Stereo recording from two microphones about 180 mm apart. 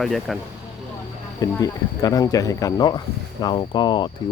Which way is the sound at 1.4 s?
20° left (ahead or behind).